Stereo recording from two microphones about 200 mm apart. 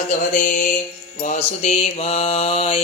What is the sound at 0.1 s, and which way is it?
Music, 35° left (ahead or behind).